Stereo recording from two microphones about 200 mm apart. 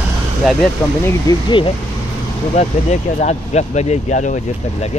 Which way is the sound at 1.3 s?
25° left (ahead or behind).